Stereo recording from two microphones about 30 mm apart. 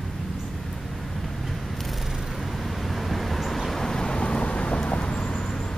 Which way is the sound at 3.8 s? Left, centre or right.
Left.